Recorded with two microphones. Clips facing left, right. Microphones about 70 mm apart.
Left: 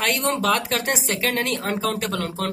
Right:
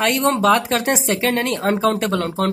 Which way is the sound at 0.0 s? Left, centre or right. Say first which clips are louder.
Right 6 dB; right.